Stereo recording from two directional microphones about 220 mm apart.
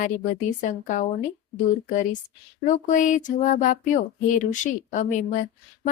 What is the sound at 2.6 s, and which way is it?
A woman's voice, 35° left (ahead or behind).